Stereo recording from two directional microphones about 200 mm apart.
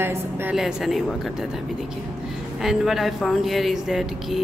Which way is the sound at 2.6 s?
Centre (ahead or behind).